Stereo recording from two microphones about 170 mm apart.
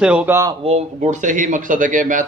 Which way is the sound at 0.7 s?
40° right (ahead or behind).